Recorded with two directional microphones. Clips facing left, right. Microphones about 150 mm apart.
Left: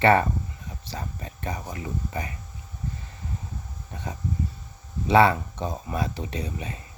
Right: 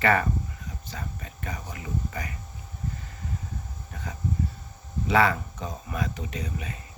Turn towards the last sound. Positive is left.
turn(degrees=30)  # may be behind; listen again after turning